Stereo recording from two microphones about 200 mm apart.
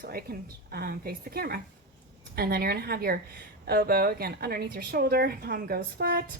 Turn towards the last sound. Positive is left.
turn(degrees=-50)  # may be behind; listen again after turning